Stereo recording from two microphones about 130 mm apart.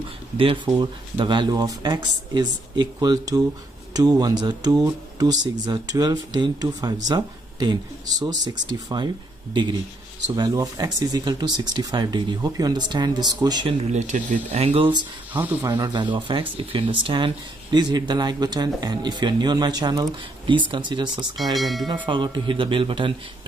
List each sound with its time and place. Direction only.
0.7 s speech: 35° right (ahead or behind)
13.8 s speech: 65° right (ahead or behind)
14.6 s speech: 45° right (ahead or behind)
21.5 s speech: centre (ahead or behind)
21.8 s speech: 35° right (ahead or behind)